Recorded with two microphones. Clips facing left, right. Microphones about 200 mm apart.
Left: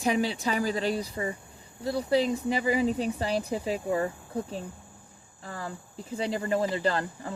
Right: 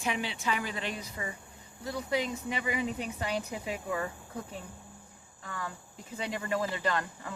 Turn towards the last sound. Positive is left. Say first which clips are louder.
# left 4 dB
turn(degrees=30)  # may be behind; listen again after turning